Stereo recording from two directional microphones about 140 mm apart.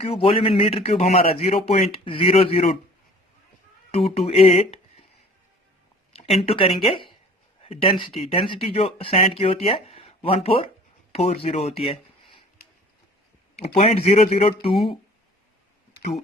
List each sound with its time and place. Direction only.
0.0 s speech: 45° left (ahead or behind)
3.9 s speech: 45° left (ahead or behind)
6.1 s speech: 45° left (ahead or behind)
13.6 s speech: 50° left (ahead or behind)